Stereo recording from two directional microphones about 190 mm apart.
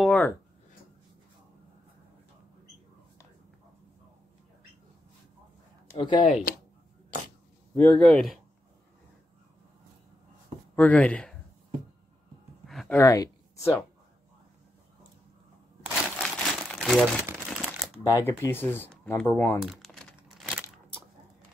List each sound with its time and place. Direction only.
0.0 s a sound: 5° left (ahead or behind)
5.9 s speech: 25° left (ahead or behind)
7.7 s speech: 5° left (ahead or behind)
10.8 s speech: 5° left (ahead or behind)
12.6 s a sound: centre (ahead or behind)
13.0 s speech: 15° left (ahead or behind)
16.2 s crumpling: centre (ahead or behind)
18.0 s speech: 15° left (ahead or behind)
19.6 s crumpling: centre (ahead or behind)